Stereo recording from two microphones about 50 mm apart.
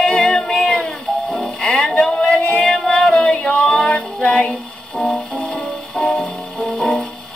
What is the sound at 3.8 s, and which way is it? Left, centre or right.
Music, left.